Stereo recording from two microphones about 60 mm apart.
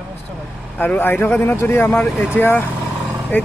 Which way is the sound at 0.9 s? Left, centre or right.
Left.